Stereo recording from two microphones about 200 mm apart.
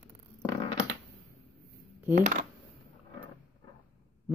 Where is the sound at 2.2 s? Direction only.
40° right (ahead or behind).